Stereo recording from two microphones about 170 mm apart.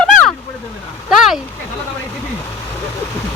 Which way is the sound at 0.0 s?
5° left (ahead or behind).